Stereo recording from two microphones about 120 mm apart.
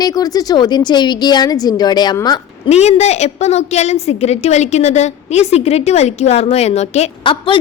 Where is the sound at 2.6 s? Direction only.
65° left (ahead or behind).